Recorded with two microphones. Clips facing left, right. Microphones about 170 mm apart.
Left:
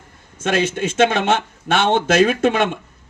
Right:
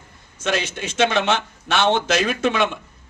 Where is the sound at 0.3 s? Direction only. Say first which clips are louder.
Left 5 dB; 50° left (ahead or behind).